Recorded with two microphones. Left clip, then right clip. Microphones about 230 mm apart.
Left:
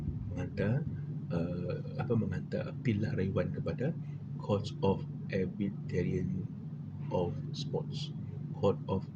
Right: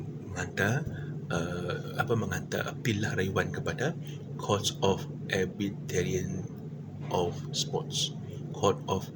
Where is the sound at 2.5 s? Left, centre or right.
Right.